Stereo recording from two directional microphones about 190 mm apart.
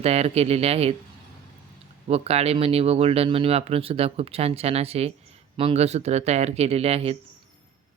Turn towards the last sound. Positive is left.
turn(degrees=-30)  # may be behind; listen again after turning